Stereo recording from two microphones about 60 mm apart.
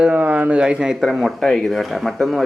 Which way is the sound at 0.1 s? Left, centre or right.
Right.